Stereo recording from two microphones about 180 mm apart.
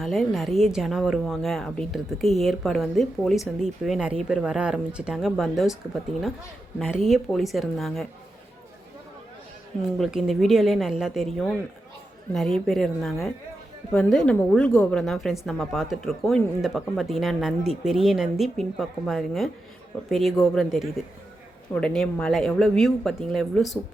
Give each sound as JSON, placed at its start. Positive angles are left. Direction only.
{"t": 0.0, "sound": "speech", "side_deg": 0}
{"t": 7.1, "sound": "speech", "side_deg": 0}
{"t": 10.0, "sound": "speech", "side_deg": 0}
{"t": 12.3, "sound": "speech", "side_deg": 0}